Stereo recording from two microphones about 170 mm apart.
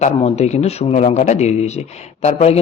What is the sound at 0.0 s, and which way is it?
Speech, 40° left (ahead or behind).